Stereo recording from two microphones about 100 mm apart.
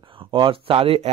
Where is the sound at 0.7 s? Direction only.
70° right (ahead or behind).